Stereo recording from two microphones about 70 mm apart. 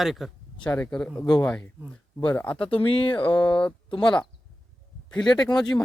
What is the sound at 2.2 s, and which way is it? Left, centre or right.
Speech, left.